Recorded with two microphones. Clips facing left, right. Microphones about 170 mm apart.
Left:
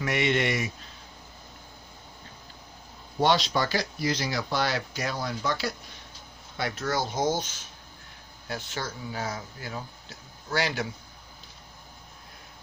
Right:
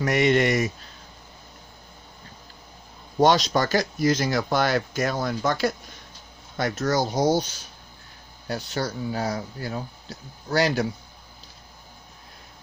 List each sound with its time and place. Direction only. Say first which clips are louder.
0.0 s speech: right 6 dB; 40° right (ahead or behind)
3.2 s speech: right 5 dB; 45° right (ahead or behind)